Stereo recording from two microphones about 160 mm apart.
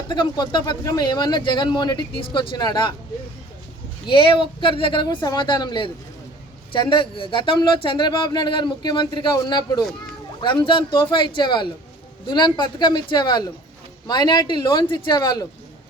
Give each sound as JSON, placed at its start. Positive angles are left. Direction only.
{"t": 0.1, "sound": "speech", "side_deg": 30}
{"t": 4.0, "sound": "speech", "side_deg": 30}